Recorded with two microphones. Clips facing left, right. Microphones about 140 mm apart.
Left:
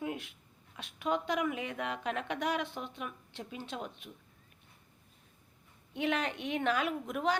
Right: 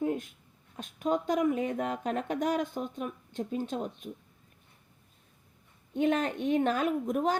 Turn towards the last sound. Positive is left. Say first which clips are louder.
# right 4 dB
turn(degrees=-45)  # may be behind; listen again after turning